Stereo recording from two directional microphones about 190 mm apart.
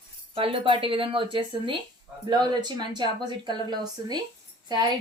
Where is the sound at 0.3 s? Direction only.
30° right (ahead or behind).